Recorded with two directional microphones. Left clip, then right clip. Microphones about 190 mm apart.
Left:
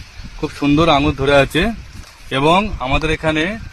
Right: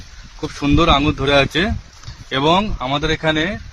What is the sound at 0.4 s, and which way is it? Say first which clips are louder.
Speech: left 1 dB; 25° left (ahead or behind).